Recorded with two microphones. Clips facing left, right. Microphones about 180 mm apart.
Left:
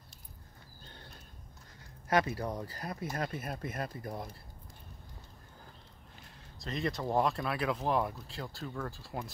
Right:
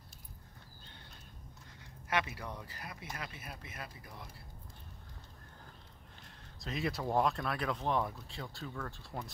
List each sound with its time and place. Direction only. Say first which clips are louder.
2.0 s speech: left 6 dB; 40° left (ahead or behind)
6.6 s speech: left 2 dB; 5° right (ahead or behind)